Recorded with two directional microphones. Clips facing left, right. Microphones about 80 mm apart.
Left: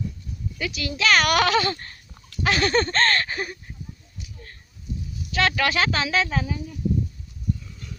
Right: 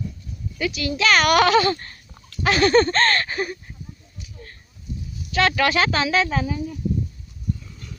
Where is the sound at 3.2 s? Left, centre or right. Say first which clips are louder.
Right 4 dB; right.